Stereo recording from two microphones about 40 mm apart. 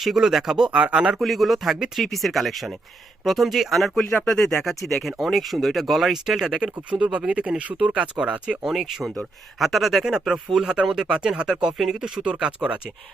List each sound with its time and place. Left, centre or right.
0.0 s speech: centre
0.7 s speech: right
1.2 s speech: centre
6.6 s speech: right
8.6 s speech: centre
10.0 s speech: centre
12.2 s speech: right